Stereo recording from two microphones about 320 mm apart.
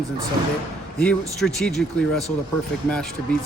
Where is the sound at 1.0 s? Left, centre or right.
Centre.